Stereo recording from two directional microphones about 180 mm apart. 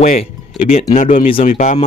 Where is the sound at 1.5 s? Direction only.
40° left (ahead or behind).